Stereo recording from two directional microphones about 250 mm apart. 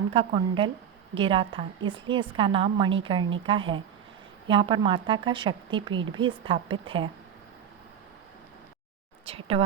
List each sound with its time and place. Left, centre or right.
0.1 s speech: right
9.2 s speech: right